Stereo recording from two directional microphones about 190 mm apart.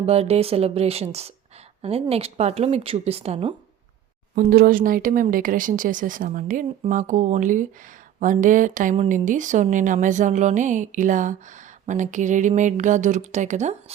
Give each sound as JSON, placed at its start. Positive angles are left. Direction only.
{"t": 0.0, "sound": "speech", "side_deg": -35}
{"t": 4.4, "sound": "a woman's voice", "side_deg": -50}